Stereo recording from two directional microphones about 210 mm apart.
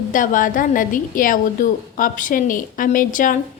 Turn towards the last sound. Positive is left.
turn(degrees=40)  # may be behind; listen again after turning